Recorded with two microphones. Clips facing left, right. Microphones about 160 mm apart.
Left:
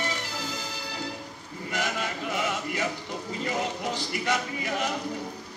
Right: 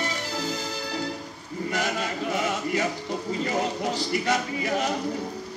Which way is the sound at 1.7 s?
40° right (ahead or behind).